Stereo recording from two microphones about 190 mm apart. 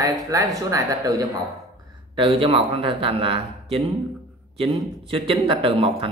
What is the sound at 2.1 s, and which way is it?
A man's voice, 30° right (ahead or behind).